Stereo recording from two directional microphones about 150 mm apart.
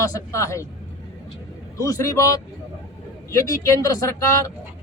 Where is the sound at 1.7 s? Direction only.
20° left (ahead or behind).